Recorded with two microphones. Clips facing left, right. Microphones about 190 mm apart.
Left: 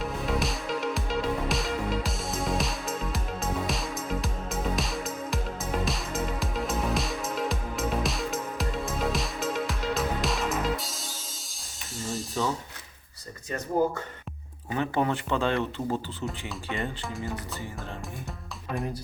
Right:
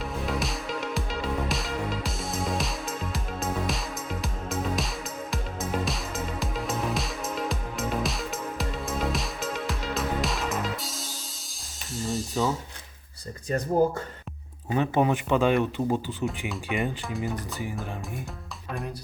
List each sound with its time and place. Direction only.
0.0 s music: centre (ahead or behind)
14.7 s speech: 20° right (ahead or behind)